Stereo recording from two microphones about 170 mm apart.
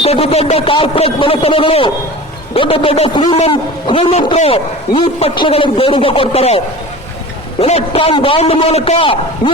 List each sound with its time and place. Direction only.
0.0 s a man's voice: 35° left (ahead or behind)
7.6 s a man's voice: 35° left (ahead or behind)